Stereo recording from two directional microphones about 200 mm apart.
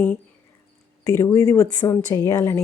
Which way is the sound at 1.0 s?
15° left (ahead or behind).